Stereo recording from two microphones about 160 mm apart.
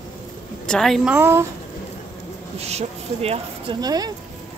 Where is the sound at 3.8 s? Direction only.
25° right (ahead or behind).